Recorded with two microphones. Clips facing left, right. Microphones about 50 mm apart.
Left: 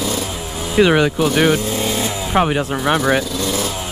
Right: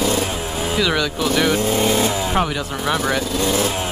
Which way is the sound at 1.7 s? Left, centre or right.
Right.